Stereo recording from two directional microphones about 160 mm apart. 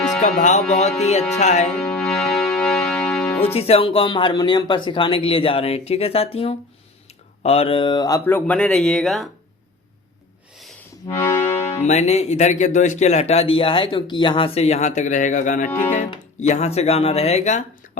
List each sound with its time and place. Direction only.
0.2 s speech: 50° left (ahead or behind)
1.9 s music: centre (ahead or behind)
3.4 s speech: 40° left (ahead or behind); by 9.3 s centre (ahead or behind)
11.2 s music: 15° left (ahead or behind)
11.8 s speech: 45° left (ahead or behind)
15.7 s speech: 15° left (ahead or behind)
16.4 s speech: 45° left (ahead or behind)